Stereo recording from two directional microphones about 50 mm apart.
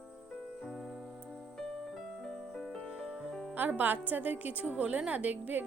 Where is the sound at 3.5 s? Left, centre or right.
Right.